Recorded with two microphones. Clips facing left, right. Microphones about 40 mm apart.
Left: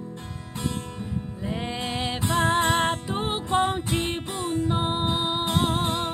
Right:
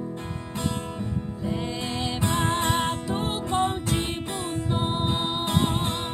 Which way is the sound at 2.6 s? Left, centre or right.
Centre.